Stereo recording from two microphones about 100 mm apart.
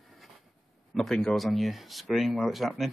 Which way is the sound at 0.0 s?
Centre (ahead or behind).